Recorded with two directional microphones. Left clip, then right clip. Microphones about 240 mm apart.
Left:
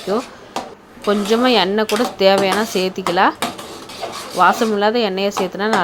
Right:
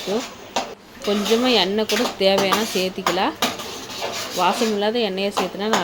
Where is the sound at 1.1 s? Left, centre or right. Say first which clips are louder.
Left 4 dB; centre.